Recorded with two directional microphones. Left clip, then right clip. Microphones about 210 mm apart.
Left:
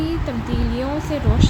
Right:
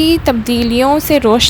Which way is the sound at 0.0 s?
50° right (ahead or behind).